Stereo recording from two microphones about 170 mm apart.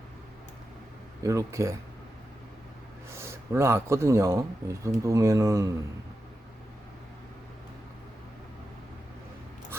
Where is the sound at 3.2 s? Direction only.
15° right (ahead or behind).